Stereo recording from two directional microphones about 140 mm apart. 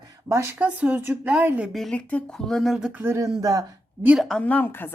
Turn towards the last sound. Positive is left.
turn(degrees=15)  # may be behind; listen again after turning